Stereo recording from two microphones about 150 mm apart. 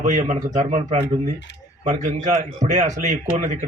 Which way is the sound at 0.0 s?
50° right (ahead or behind).